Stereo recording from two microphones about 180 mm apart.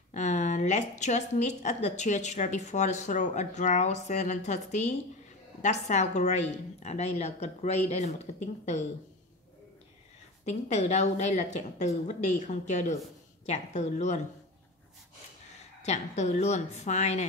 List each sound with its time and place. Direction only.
0.1 s a woman's voice: 40° left (ahead or behind)
10.4 s a woman's voice: 40° left (ahead or behind)
15.8 s a woman's voice: 40° left (ahead or behind)